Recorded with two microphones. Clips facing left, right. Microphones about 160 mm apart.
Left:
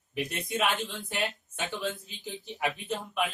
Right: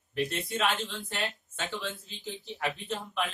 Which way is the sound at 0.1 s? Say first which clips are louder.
Right 1 dB; 15° left (ahead or behind).